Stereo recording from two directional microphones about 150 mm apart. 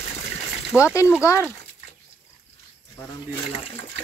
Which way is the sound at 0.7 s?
5° right (ahead or behind).